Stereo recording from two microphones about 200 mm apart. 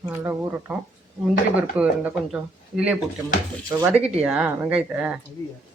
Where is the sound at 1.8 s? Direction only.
5° right (ahead or behind).